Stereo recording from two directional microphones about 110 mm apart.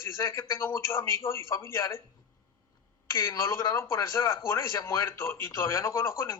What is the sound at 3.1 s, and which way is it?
Speech, 25° left (ahead or behind).